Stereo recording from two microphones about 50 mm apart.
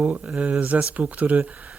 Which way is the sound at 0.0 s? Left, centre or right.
Right.